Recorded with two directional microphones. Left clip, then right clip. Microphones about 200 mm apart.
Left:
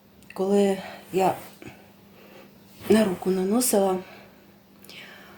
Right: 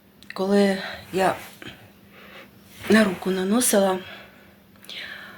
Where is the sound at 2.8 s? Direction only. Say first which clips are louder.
Right 1 dB; 20° left (ahead or behind).